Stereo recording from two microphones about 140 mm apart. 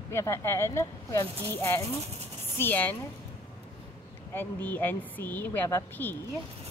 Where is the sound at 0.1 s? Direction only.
20° left (ahead or behind).